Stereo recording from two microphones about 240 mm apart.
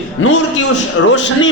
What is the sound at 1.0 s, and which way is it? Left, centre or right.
Speech, left.